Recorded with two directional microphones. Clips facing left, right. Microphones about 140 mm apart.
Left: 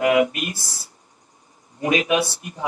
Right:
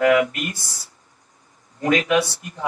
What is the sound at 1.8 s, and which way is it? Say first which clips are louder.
Speech: right 1 dB; 20° left (ahead or behind).